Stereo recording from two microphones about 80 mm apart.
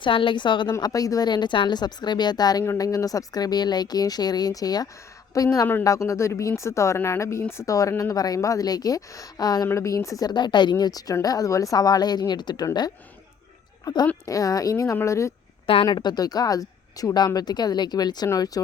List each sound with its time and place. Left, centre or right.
0.0 s a woman's voice: left
0.8 s a woman's voice: left
9.6 s a woman's voice: left
10.2 s speech: left
13.8 s a woman's voice: left
15.8 s speech: left